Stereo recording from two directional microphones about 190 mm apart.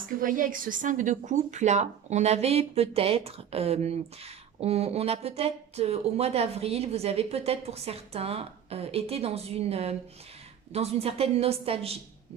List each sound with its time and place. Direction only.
0.2 s a woman's voice: 45° right (ahead or behind)